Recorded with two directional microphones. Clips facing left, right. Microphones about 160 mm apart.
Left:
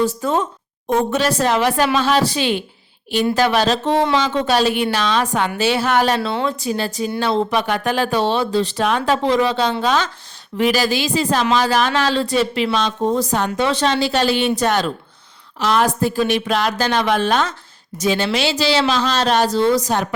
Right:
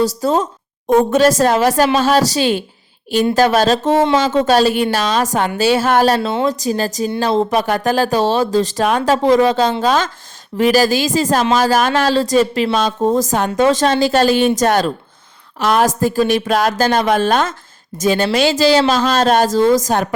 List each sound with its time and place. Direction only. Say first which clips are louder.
0.2 s speech: right 3 dB; 35° right (ahead or behind)